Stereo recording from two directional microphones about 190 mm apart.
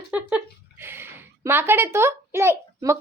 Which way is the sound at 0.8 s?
10° right (ahead or behind).